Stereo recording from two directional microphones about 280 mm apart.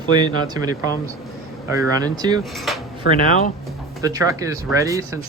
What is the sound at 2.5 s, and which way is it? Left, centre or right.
Cutlery, centre.